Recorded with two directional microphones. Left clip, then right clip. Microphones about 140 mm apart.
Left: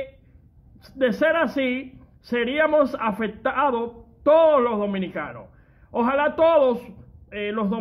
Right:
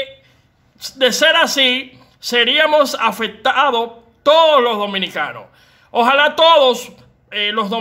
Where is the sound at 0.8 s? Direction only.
25° right (ahead or behind).